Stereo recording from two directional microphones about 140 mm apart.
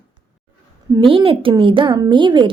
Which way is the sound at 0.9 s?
40° right (ahead or behind).